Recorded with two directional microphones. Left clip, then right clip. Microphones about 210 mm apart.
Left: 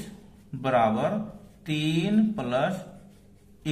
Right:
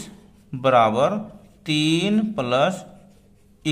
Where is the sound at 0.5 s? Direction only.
40° right (ahead or behind).